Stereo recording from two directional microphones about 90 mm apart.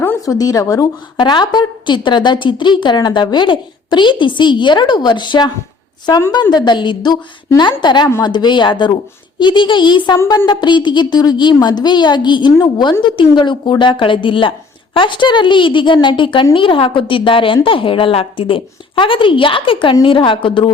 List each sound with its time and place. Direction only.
0.3 s speech: 45° left (ahead or behind)
1.1 s a woman's voice: 55° left (ahead or behind)